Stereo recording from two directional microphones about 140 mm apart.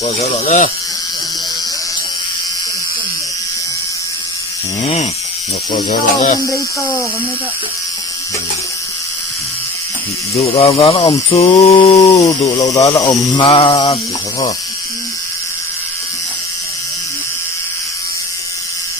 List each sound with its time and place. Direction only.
0.4 s speech: 70° left (ahead or behind)
5.7 s speech: 60° left (ahead or behind)
6.4 s speech: 25° left (ahead or behind)
10.3 s speech: 45° left (ahead or behind)
12.5 s speech: 25° left (ahead or behind)
13.4 s a sound: 40° left (ahead or behind)